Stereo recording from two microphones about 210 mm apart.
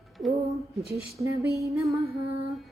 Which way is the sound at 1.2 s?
15° right (ahead or behind).